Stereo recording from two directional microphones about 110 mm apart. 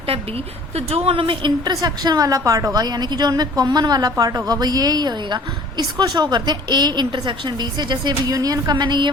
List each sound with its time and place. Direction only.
0.1 s a woman's voice: 65° right (ahead or behind); by 9.0 s 45° right (ahead or behind)